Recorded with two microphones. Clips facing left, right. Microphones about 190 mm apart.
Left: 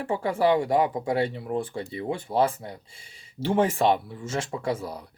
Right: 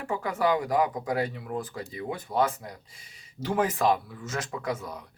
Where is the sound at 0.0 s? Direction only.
30° left (ahead or behind).